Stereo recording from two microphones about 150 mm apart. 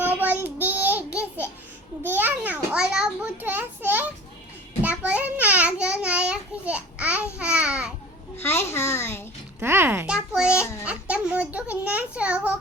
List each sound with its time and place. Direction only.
0.0 s child singing: 10° right (ahead or behind)
2.0 s a child's voice: 10° right (ahead or behind)
4.8 s a sound: 10° right (ahead or behind)
7.3 s babbling: 10° right (ahead or behind)
8.4 s a child's voice: 15° left (ahead or behind)
9.6 s a child's voice: 15° right (ahead or behind)